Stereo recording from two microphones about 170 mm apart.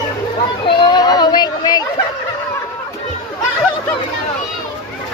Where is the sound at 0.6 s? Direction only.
25° left (ahead or behind).